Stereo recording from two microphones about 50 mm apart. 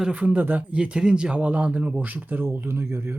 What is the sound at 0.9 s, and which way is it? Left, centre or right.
Speech, centre.